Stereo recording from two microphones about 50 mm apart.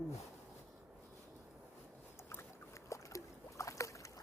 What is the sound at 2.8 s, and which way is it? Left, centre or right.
Boat, left.